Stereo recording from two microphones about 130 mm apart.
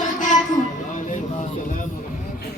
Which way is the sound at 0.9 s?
75° left (ahead or behind).